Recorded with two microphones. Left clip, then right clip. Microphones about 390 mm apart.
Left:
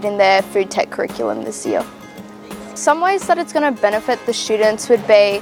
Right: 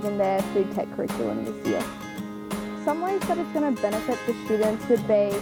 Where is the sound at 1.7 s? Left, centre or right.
Centre.